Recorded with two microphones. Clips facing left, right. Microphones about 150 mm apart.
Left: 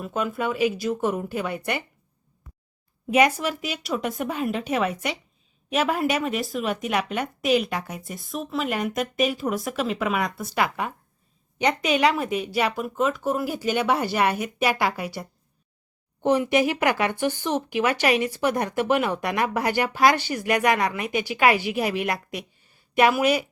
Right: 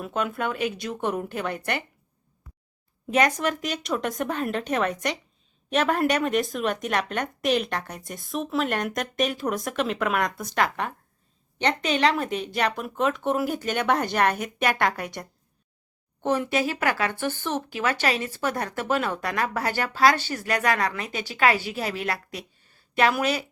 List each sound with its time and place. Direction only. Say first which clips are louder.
0.0 s a woman's voice: left 1 dB; centre (ahead or behind)
3.1 s a woman's voice: left 2 dB; 10° left (ahead or behind)